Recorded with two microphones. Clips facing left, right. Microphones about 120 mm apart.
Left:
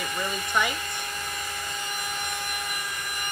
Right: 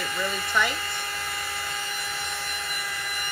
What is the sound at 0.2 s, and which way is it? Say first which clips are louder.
Speech: right 1 dB; 15° left (ahead or behind).